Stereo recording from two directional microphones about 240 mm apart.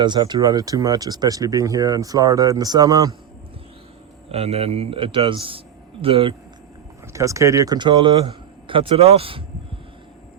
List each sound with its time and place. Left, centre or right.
0.0 s speech: centre
4.3 s speech: right